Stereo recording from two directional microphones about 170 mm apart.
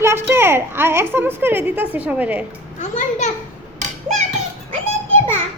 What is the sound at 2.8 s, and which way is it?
Speech, 45° left (ahead or behind).